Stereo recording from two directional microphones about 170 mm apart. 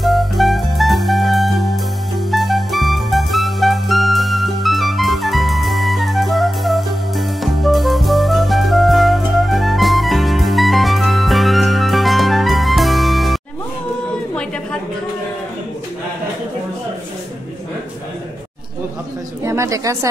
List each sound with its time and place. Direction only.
0.0 s music: centre (ahead or behind)
19.4 s bird: 20° right (ahead or behind)